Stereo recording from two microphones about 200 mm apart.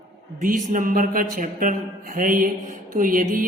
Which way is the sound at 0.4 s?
40° right (ahead or behind).